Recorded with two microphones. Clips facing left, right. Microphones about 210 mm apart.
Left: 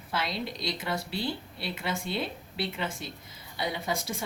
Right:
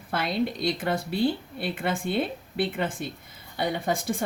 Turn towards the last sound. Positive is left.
turn(degrees=-55)  # may be behind; listen again after turning